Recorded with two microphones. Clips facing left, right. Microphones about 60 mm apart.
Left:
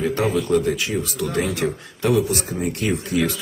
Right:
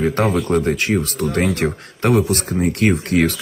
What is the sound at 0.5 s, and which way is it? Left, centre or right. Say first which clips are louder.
Speech: right 3 dB; right.